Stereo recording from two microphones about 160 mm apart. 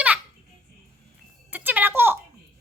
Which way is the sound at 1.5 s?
10° right (ahead or behind).